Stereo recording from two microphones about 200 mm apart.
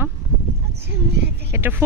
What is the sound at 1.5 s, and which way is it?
Speech, 10° right (ahead or behind).